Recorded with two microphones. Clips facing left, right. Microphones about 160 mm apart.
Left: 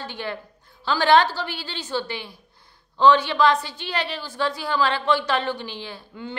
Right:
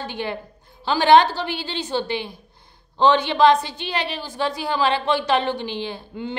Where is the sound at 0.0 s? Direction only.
20° right (ahead or behind).